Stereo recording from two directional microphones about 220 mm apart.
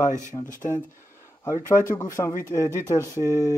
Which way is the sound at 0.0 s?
35° left (ahead or behind).